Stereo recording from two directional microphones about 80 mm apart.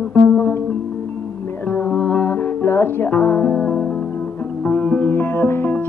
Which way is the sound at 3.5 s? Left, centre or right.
Centre.